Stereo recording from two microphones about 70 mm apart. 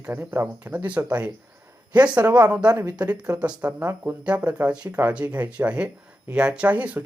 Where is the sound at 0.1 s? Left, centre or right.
Right.